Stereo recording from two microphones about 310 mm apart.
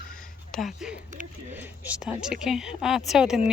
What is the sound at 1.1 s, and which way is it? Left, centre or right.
Speech, right.